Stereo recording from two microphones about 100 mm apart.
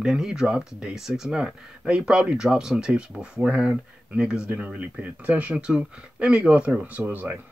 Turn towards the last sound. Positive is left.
turn(degrees=-15)  # may be behind; listen again after turning